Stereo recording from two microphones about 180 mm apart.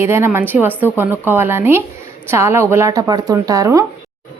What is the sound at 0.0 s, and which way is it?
A woman's voice, 15° right (ahead or behind).